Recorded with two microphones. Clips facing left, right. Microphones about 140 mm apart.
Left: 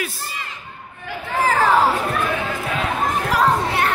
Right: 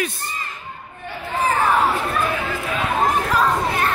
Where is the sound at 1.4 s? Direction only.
90° left.